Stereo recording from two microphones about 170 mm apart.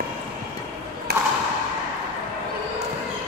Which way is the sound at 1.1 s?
65° right (ahead or behind).